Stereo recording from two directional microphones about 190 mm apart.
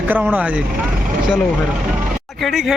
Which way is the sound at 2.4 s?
Centre (ahead or behind).